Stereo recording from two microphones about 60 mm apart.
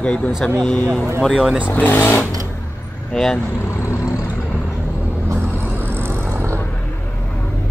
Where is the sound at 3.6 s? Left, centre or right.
Left.